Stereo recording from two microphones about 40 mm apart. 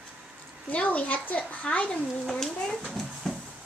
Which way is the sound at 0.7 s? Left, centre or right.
Left.